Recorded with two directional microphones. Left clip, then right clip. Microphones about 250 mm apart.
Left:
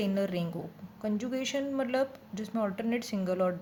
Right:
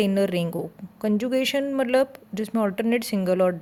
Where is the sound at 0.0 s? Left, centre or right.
Right.